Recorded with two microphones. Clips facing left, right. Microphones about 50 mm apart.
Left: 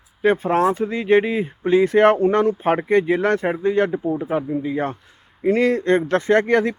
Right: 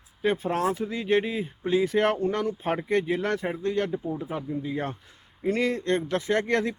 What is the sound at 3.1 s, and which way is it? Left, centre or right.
Speech, centre.